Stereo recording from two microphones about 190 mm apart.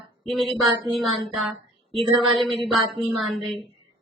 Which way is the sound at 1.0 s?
Centre (ahead or behind).